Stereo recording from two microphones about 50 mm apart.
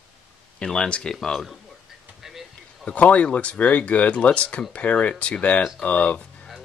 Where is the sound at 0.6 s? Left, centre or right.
Centre.